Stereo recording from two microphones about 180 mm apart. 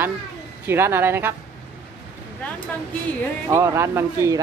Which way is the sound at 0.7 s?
15° right (ahead or behind).